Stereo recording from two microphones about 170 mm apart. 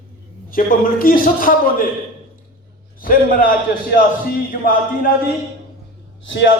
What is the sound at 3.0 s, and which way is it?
A man's voice, 55° left (ahead or behind).